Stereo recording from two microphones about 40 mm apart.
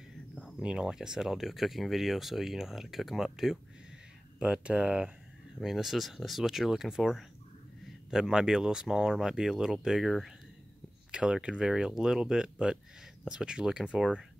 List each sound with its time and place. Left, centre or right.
0.6 s speech: right
4.4 s speech: right
5.6 s speech: centre
11.1 s speech: right
11.6 s speech: centre